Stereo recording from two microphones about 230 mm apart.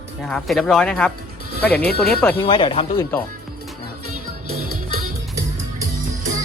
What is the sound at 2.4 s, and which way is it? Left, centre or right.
Speech, left.